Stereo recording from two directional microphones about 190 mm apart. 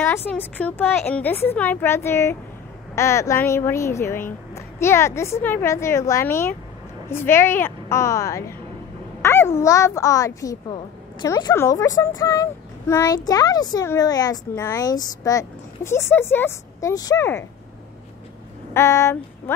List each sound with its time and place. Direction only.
0.0 s speech: 10° left (ahead or behind)
18.7 s female singing: 15° left (ahead or behind)